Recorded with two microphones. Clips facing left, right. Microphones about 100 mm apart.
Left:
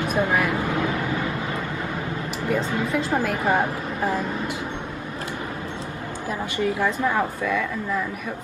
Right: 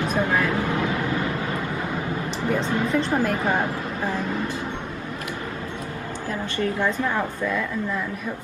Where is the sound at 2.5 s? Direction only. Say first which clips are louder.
Right 1 dB; 5° left (ahead or behind).